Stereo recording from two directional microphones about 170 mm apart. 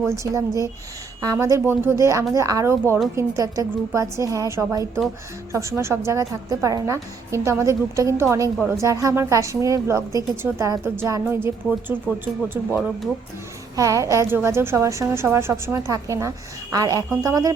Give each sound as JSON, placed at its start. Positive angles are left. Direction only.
{"t": 0.0, "sound": "a woman's voice", "side_deg": -15}
{"t": 12.7, "sound": "a woman's voice", "side_deg": -5}
{"t": 13.7, "sound": "a woman's voice", "side_deg": -20}